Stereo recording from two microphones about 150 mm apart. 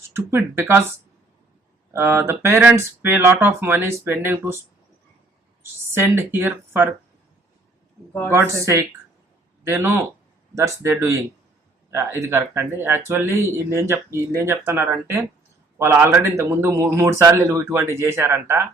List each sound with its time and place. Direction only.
0.2 s speech: 15° right (ahead or behind)
1.9 s speech: 15° right (ahead or behind)
5.9 s speech: 15° right (ahead or behind)
8.6 s speech: 20° right (ahead or behind)